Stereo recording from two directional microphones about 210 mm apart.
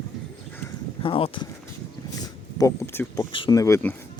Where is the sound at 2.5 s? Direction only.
15° left (ahead or behind).